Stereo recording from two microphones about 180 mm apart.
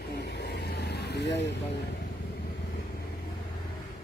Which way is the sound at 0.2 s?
65° left (ahead or behind).